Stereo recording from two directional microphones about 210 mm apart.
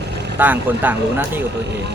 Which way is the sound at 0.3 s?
10° right (ahead or behind).